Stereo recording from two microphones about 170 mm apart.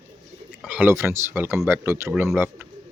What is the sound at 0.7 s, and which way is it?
Speech, 10° right (ahead or behind).